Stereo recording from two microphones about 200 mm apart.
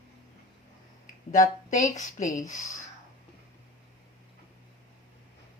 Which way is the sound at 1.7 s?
40° left (ahead or behind).